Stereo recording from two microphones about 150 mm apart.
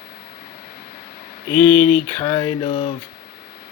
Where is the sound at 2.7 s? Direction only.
60° left (ahead or behind).